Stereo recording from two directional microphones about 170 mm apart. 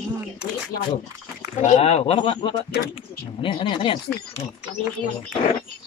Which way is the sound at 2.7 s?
85° left.